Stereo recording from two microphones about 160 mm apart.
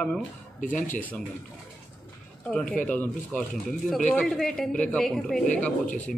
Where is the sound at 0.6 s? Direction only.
55° left (ahead or behind).